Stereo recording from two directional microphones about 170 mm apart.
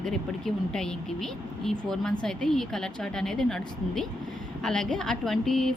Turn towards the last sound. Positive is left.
turn(degrees=0)  # may be behind; listen again after turning